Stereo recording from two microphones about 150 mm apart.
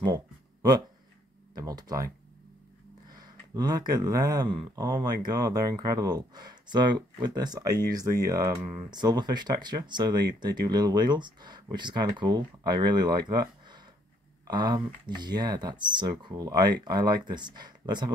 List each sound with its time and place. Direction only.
0.0 s a sound: 25° right (ahead or behind)
1.5 s speech: 25° right (ahead or behind)
3.1 s speech: 25° right (ahead or behind)